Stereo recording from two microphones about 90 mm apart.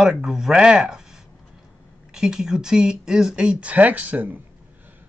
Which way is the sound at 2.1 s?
5° right (ahead or behind).